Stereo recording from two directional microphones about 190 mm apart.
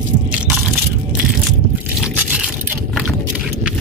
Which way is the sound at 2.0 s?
10° right (ahead or behind).